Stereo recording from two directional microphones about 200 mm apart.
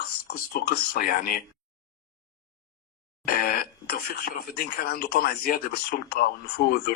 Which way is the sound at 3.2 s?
50° left (ahead or behind).